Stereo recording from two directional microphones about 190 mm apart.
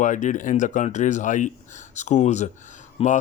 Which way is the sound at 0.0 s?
40° left (ahead or behind).